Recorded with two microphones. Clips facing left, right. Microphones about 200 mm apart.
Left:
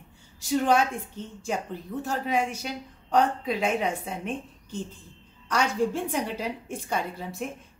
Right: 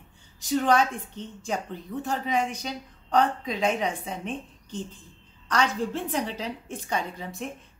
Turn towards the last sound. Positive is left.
turn(degrees=5)  # may be behind; listen again after turning